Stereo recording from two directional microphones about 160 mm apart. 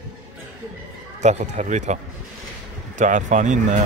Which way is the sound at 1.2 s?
45° right (ahead or behind).